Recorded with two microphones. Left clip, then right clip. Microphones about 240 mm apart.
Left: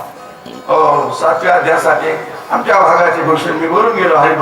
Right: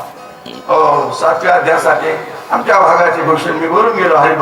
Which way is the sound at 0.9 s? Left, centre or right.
Left.